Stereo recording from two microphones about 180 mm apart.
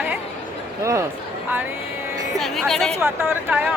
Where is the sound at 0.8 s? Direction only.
15° right (ahead or behind).